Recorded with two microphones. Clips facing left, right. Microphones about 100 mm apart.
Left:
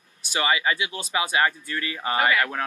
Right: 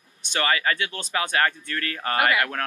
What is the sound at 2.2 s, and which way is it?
Speech, 10° right (ahead or behind).